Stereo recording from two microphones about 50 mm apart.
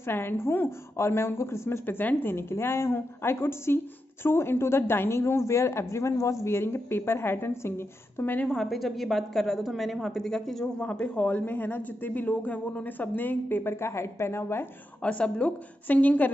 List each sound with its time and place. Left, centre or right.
0.0 s speech: left
1.9 s a woman's voice: left
2.5 s speech: left
6.4 s a woman's voice: left
8.5 s a woman's voice: centre
10.8 s a woman's voice: left
15.0 s a woman's voice: left